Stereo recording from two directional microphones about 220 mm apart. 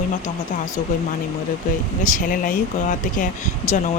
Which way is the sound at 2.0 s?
35° left (ahead or behind).